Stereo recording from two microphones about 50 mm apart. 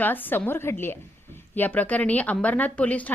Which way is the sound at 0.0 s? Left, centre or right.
Left.